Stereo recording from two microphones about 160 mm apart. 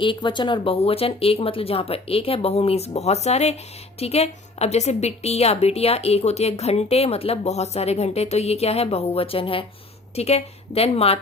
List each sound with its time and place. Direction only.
0.0 s a woman's voice: 30° left (ahead or behind)